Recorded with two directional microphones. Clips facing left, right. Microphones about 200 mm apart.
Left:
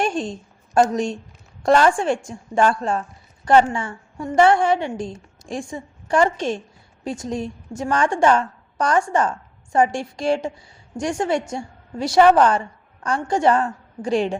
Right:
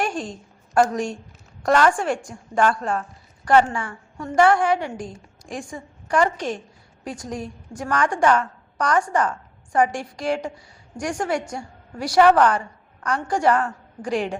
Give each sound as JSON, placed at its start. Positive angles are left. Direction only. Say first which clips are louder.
{"t": 0.0, "sound": "a woman's voice", "louder": "left 3 dB", "side_deg": 25}